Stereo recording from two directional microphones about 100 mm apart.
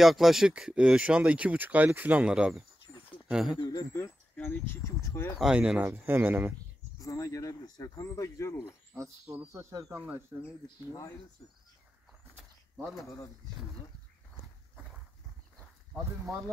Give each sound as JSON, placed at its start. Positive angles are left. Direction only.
{"t": 0.0, "sound": "speech", "side_deg": -5}
{"t": 3.5, "sound": "speech", "side_deg": 45}
{"t": 3.9, "sound": "a sound", "side_deg": 30}
{"t": 4.5, "sound": "speech", "side_deg": 15}
{"t": 4.8, "sound": "speech", "side_deg": 25}
{"t": 5.4, "sound": "speech", "side_deg": -10}
{"t": 5.9, "sound": "speech", "side_deg": -20}
{"t": 7.0, "sound": "speech", "side_deg": 35}
{"t": 8.9, "sound": "speech", "side_deg": -30}
{"t": 9.9, "sound": "speech", "side_deg": -15}
{"t": 10.9, "sound": "speech", "side_deg": 35}